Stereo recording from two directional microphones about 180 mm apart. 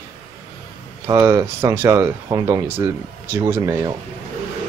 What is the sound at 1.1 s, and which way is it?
Speech, 20° right (ahead or behind).